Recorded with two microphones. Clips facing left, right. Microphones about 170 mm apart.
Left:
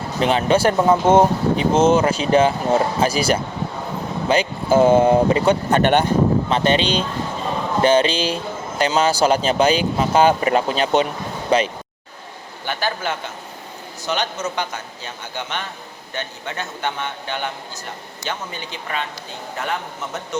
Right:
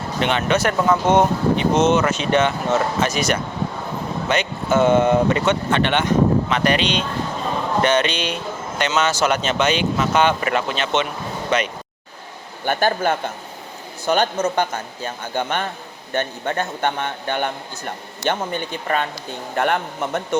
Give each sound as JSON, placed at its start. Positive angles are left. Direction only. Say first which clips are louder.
{"t": 0.2, "sound": "speech", "louder": "left 3 dB", "side_deg": 35}
{"t": 12.6, "sound": "a man's voice", "louder": "right 5 dB", "side_deg": -50}